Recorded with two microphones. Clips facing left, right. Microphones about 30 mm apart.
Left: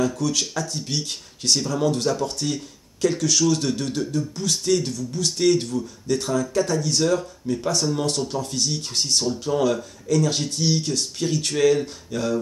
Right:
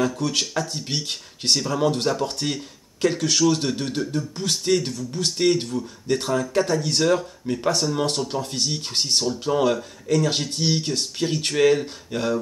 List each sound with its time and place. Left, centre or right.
0.2 s speech: right
6.0 s speech: right